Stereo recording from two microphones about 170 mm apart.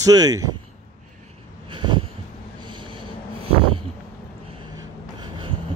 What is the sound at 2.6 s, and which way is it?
Snort, 30° right (ahead or behind).